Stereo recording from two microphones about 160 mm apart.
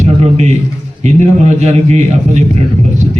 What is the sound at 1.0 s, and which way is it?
A man's voice, 45° right (ahead or behind).